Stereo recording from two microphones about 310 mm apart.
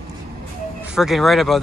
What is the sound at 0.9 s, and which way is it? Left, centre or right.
Speech, centre.